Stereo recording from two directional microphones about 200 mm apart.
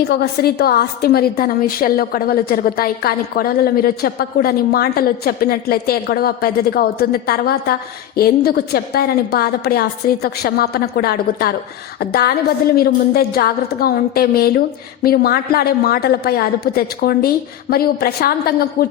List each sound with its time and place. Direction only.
0.1 s a woman's voice: 55° left (ahead or behind)